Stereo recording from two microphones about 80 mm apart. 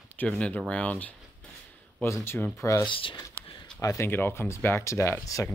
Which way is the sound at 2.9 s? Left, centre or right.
Left.